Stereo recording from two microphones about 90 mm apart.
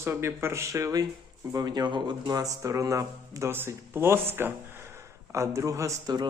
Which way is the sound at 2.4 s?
40° right (ahead or behind).